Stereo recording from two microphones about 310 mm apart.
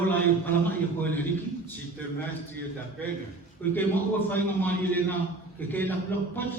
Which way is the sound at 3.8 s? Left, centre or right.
Centre.